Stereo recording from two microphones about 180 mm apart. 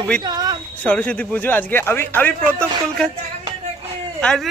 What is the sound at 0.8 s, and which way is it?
Speech, 5° left (ahead or behind).